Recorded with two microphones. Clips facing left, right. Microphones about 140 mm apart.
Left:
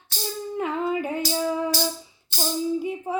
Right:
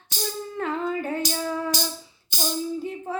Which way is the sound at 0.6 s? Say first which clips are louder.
Left 1 dB; 15° left (ahead or behind).